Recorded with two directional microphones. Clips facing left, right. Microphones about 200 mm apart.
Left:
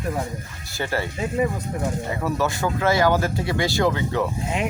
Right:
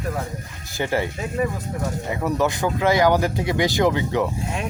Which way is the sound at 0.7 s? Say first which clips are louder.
Right 3 dB; 15° right (ahead or behind).